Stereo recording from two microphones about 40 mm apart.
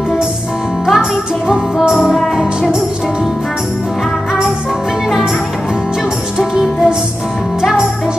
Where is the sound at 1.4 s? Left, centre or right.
Right.